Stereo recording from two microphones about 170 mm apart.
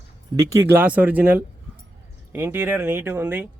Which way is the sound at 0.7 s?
10° right (ahead or behind).